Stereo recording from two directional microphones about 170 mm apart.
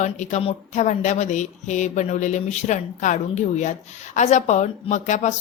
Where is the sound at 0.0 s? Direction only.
45° left (ahead or behind).